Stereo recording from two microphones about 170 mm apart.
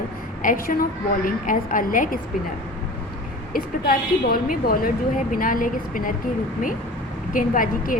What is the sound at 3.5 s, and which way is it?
Speech, 55° left (ahead or behind).